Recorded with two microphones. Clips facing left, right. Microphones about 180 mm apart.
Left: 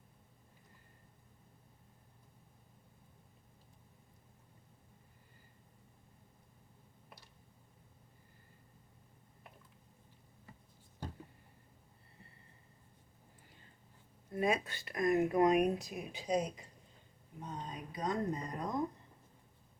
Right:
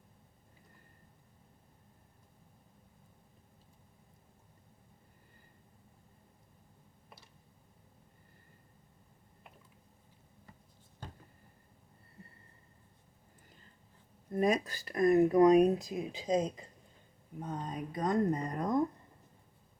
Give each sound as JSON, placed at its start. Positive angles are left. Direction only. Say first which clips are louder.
{"t": 14.3, "sound": "speech", "louder": "right 4 dB", "side_deg": -40}
{"t": 16.1, "sound": "a woman's voice", "louder": "right 3 dB", "side_deg": -90}
{"t": 17.4, "sound": "speech", "louder": "right 6 dB", "side_deg": -50}